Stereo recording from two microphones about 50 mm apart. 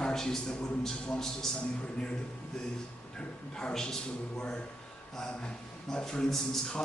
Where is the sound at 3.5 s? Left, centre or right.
Centre.